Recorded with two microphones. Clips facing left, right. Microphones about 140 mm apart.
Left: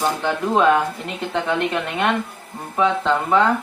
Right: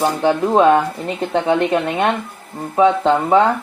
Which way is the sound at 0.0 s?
40° right (ahead or behind).